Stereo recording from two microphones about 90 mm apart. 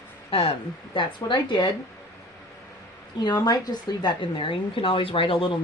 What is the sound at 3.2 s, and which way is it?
Speech, 50° left (ahead or behind).